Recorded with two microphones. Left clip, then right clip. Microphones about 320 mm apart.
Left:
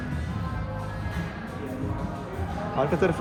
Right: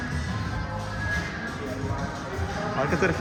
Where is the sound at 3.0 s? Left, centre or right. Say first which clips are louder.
Even; centre.